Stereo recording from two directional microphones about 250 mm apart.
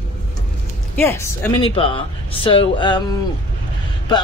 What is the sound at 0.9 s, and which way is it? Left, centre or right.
Speech, centre.